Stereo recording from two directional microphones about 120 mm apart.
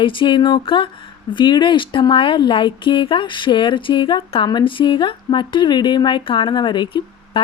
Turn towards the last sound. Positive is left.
turn(degrees=40)  # may be behind; listen again after turning